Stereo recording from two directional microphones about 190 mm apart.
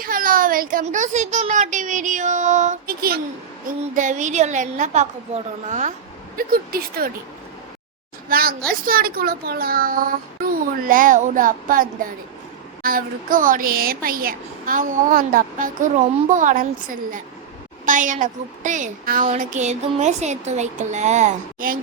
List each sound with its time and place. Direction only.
0.0 s a woman's voice: 45° right (ahead or behind)
6.3 s speech: 50° right (ahead or behind)
8.3 s a woman's voice: 50° right (ahead or behind)